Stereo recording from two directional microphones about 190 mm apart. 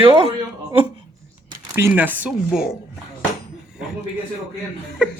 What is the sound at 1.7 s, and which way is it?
Speech, 10° right (ahead or behind).